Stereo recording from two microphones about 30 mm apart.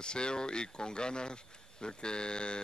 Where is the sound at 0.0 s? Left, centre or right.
Left.